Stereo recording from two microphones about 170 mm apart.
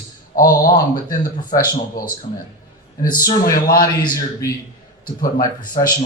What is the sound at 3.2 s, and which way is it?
Speech, 20° left (ahead or behind).